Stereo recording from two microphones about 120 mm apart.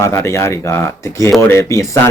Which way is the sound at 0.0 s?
25° left (ahead or behind).